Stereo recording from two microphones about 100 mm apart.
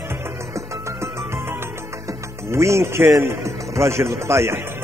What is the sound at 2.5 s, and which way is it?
A man's voice, 30° right (ahead or behind).